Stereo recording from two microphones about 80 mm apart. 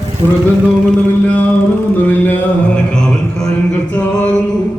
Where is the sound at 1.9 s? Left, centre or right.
Left.